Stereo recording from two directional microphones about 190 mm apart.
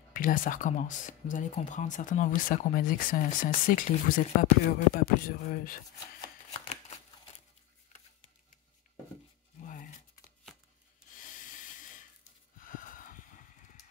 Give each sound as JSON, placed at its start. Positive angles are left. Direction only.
{"t": 0.1, "sound": "speech", "side_deg": 45}
{"t": 9.7, "sound": "crumpling", "side_deg": 45}
{"t": 11.1, "sound": "snort", "side_deg": 45}